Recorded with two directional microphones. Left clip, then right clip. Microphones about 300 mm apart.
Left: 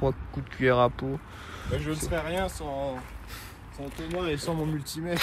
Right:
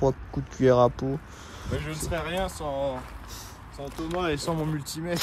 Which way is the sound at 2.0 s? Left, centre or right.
Centre.